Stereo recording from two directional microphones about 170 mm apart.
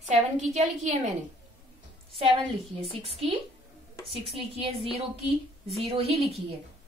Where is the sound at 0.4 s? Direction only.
40° right (ahead or behind).